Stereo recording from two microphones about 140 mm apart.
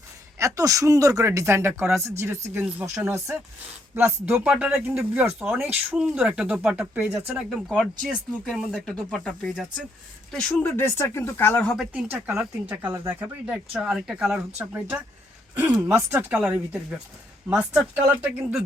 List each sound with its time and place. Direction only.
0.3 s speech: 25° right (ahead or behind)
7.7 s speech: centre (ahead or behind)
11.7 s speech: 5° right (ahead or behind)
12.1 s speech: 15° right (ahead or behind)